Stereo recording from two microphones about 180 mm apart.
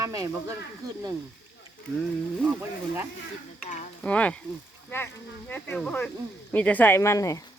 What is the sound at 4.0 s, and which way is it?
Speech, 5° left (ahead or behind).